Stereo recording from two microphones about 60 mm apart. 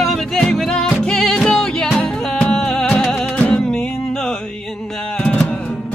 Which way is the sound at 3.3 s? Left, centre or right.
Left.